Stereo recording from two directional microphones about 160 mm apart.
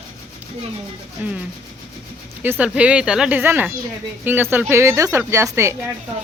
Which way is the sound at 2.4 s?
10° right (ahead or behind).